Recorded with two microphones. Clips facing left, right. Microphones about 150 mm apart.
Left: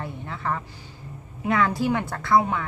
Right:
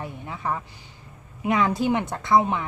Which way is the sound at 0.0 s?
15° right (ahead or behind).